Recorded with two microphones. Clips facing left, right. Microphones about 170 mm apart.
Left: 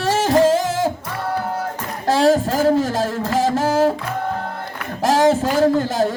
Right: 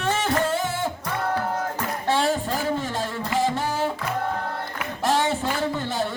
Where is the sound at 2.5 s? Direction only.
40° left (ahead or behind).